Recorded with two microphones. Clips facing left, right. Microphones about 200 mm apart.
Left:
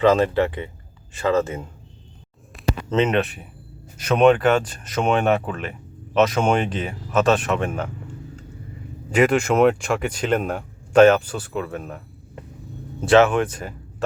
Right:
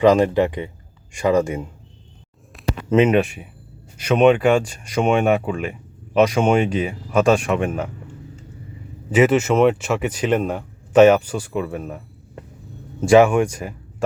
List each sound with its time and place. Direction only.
0.0 s speech: 15° right (ahead or behind)
2.9 s speech: 10° right (ahead or behind)
9.0 s speech: 5° right (ahead or behind)